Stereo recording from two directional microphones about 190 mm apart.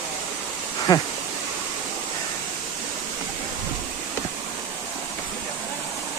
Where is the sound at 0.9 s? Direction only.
20° left (ahead or behind).